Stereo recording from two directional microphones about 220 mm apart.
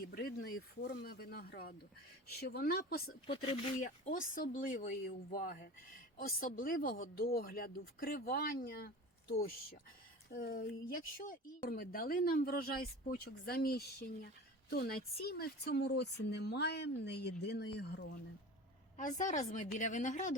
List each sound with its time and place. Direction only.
0.0 s speech: 45° left (ahead or behind)
3.2 s speech: 25° left (ahead or behind)
3.8 s speech: 40° left (ahead or behind)
10.2 s speech: 40° left (ahead or behind)
18.9 s speech: 35° left (ahead or behind)